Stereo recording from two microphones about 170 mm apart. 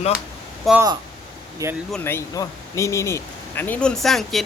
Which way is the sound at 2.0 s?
15° left (ahead or behind).